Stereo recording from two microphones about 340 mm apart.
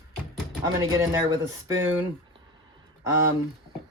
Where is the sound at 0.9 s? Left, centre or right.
Centre.